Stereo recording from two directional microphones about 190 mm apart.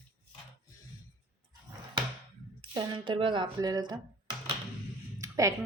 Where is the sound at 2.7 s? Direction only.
25° right (ahead or behind).